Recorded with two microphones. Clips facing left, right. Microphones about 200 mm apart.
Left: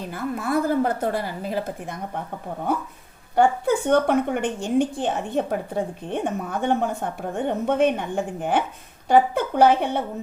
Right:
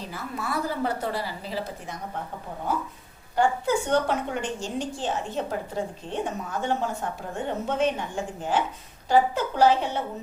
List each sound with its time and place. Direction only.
0.0 s a woman's voice: 55° left (ahead or behind)
3.3 s a woman's voice: 55° left (ahead or behind)